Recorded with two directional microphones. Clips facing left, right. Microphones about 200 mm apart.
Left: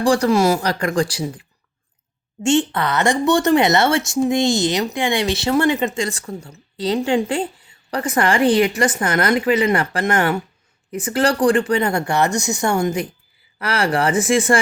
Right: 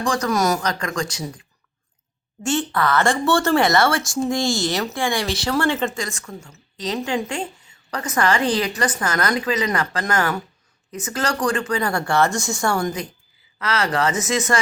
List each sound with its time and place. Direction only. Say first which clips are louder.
0.0 s speech: left 6 dB; 30° left (ahead or behind)
2.4 s speech: left 4 dB; 25° left (ahead or behind)